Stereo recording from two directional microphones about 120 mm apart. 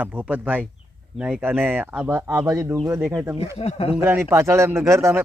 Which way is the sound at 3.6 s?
55° left (ahead or behind).